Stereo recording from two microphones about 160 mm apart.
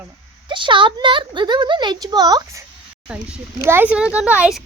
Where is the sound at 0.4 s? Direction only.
30° right (ahead or behind).